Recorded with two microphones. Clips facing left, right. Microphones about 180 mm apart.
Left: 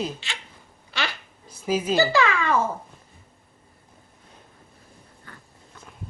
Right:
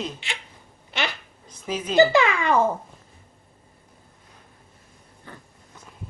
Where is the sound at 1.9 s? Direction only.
20° right (ahead or behind).